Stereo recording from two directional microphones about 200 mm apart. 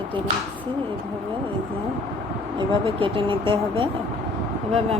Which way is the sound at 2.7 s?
25° right (ahead or behind).